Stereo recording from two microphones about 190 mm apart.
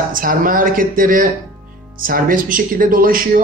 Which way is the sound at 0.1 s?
45° right (ahead or behind).